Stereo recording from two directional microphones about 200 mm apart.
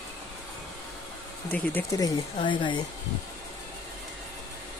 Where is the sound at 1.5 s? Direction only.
10° left (ahead or behind).